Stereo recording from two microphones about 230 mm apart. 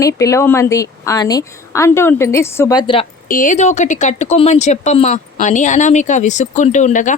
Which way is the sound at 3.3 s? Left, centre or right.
Left.